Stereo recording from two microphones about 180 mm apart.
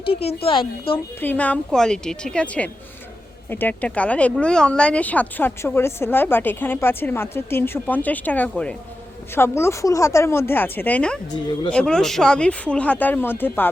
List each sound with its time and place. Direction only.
0.1 s a woman's voice: 35° left (ahead or behind)
1.2 s speech: 10° left (ahead or behind)